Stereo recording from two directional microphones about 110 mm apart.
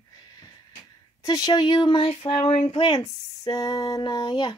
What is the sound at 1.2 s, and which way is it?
Speech, 35° left (ahead or behind).